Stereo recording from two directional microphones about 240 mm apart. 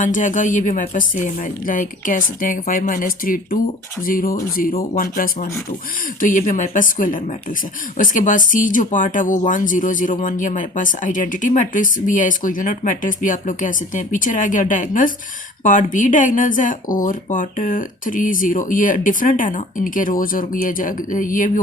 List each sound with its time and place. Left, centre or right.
0.0 s speech: left